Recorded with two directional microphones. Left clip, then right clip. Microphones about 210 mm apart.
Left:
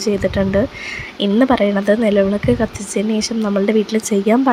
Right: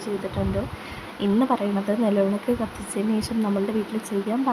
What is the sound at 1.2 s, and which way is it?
Speech, 15° left (ahead or behind).